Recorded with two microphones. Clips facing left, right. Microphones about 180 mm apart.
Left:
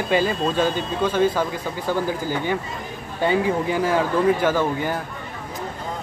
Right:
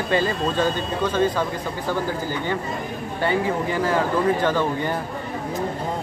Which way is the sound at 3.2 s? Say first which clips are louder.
Left 2 dB; 15° left (ahead or behind).